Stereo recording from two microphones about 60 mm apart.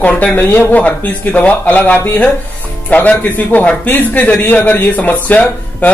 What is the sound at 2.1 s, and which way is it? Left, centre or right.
Music, left.